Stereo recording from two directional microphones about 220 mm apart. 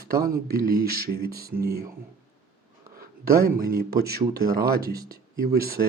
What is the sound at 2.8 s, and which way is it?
Speech, 40° right (ahead or behind).